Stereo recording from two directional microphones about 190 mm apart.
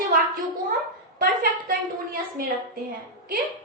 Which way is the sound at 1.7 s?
50° right (ahead or behind).